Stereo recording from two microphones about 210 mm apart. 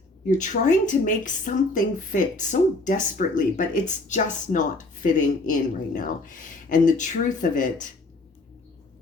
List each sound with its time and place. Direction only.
0.3 s a woman's voice: 35° left (ahead or behind)